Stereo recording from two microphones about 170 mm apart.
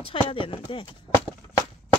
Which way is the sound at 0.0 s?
30° left (ahead or behind).